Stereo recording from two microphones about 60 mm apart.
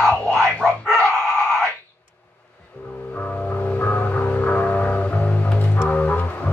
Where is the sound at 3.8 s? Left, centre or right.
Left.